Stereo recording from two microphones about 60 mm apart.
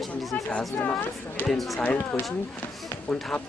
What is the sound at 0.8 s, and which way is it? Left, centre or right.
Speech, left.